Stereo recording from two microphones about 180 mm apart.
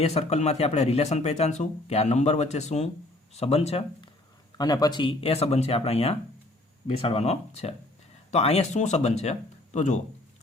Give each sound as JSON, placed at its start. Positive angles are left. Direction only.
{"t": 0.0, "sound": "speech", "side_deg": 35}
{"t": 4.5, "sound": "speech", "side_deg": 20}